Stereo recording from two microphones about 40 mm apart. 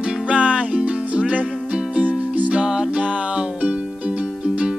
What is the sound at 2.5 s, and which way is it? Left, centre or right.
Music, right.